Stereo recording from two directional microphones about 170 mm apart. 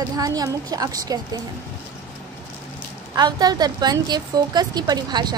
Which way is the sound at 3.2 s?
25° right (ahead or behind).